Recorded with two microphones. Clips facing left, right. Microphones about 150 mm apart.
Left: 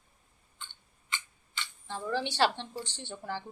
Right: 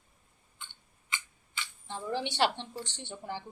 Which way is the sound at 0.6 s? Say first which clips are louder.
Left 1 dB; 10° right (ahead or behind).